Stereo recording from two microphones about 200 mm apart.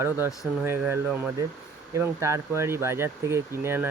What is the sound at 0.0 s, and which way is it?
Speech, 10° right (ahead or behind).